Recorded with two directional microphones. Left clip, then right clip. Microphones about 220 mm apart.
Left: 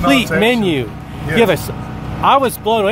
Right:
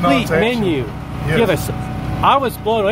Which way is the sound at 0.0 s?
20° left (ahead or behind).